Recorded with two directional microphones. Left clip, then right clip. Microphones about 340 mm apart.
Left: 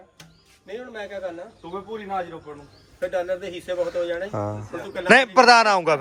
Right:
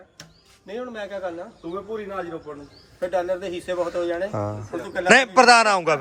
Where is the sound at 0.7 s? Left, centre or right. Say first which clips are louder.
Right 2 dB; right.